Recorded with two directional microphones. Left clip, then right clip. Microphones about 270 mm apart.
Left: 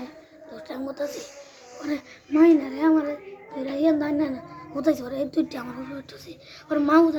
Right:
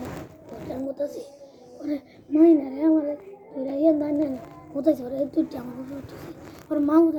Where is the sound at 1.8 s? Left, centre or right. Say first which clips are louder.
Even; centre.